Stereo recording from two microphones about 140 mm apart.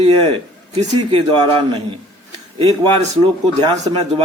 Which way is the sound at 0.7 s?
40° right (ahead or behind).